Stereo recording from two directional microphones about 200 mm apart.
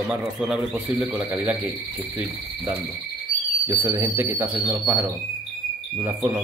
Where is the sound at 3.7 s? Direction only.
10° right (ahead or behind).